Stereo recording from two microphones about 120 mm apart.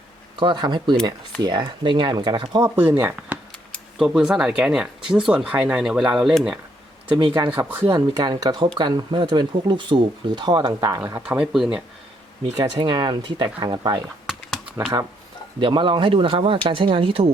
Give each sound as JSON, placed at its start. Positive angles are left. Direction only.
{"t": 0.3, "sound": "speech", "side_deg": -40}
{"t": 2.6, "sound": "speech", "side_deg": -25}
{"t": 3.9, "sound": "speech", "side_deg": -5}
{"t": 7.2, "sound": "speech", "side_deg": -40}
{"t": 7.5, "sound": "speech", "side_deg": -20}
{"t": 7.9, "sound": "speech", "side_deg": -35}
{"t": 11.3, "sound": "speech", "side_deg": -5}
{"t": 12.5, "sound": "speech", "side_deg": -35}
{"t": 14.3, "sound": "typing", "side_deg": -5}
{"t": 15.6, "sound": "speech", "side_deg": -45}